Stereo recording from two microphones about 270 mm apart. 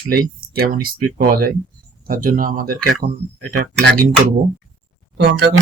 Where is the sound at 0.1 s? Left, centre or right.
Right.